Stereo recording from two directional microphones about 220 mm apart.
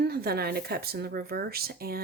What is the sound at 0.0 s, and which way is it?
Speech, 45° right (ahead or behind).